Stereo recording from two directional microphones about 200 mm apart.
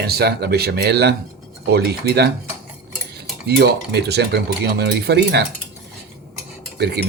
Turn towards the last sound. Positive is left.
turn(degrees=-55)  # may be behind; listen again after turning